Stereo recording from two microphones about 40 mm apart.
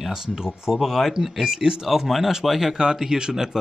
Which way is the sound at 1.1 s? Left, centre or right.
Centre.